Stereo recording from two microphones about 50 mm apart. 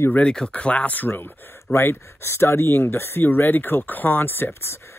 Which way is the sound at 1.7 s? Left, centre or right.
Left.